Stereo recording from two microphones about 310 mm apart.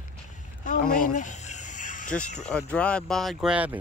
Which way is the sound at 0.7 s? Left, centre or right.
Left.